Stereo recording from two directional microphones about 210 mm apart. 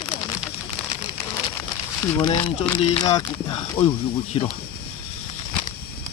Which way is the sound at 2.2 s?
25° left (ahead or behind).